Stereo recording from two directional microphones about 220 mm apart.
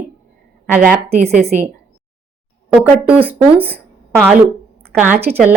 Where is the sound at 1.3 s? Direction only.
35° right (ahead or behind).